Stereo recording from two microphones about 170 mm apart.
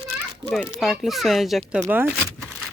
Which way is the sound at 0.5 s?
Centre (ahead or behind).